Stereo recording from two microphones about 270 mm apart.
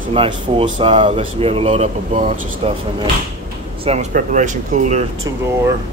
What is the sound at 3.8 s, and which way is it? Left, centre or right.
Speech, right.